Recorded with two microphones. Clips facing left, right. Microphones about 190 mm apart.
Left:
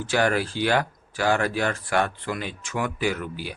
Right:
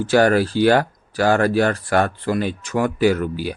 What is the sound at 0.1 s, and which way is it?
A man's voice, 40° right (ahead or behind).